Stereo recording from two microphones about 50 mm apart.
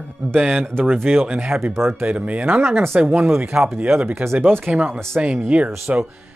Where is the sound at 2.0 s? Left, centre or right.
Right.